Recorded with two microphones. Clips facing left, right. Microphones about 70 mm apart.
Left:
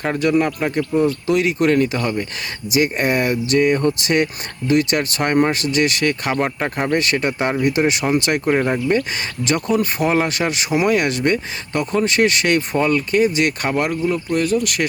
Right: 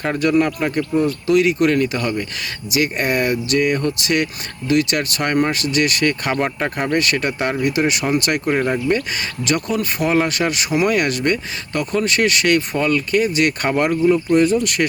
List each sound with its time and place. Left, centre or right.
0.2 s speech: centre
6.3 s speech: centre
6.9 s speech: left
8.4 s speech: centre
13.6 s speech: centre